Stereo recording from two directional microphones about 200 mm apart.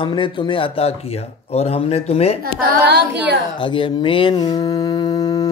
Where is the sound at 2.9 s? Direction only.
60° right (ahead or behind).